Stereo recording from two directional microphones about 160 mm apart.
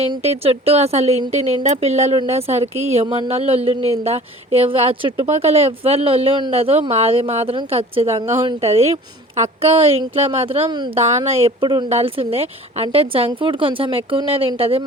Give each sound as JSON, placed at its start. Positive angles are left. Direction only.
{"t": 0.0, "sound": "speech", "side_deg": -40}